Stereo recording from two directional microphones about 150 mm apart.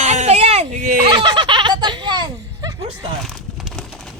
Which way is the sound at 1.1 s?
30° right (ahead or behind).